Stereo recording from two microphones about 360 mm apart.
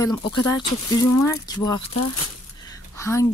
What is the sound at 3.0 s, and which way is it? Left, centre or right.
Speech, centre.